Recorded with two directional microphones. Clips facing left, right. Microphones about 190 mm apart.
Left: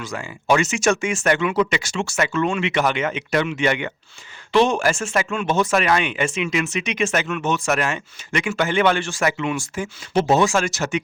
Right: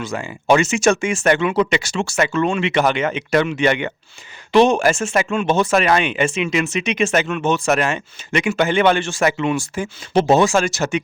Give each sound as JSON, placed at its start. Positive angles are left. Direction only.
{"t": 0.0, "sound": "speech", "side_deg": -25}